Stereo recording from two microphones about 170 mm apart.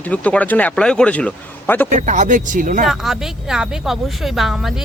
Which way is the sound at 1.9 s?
45° right (ahead or behind).